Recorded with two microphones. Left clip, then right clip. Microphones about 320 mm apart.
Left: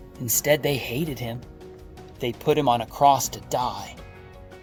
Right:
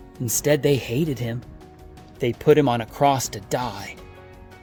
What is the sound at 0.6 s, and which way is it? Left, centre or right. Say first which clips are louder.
Speech: right 4 dB; right.